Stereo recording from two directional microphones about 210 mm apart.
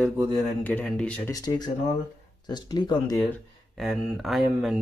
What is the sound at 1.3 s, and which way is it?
Speech, 20° left (ahead or behind).